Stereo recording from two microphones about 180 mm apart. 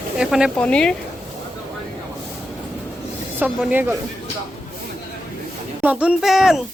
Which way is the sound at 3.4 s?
10° right (ahead or behind).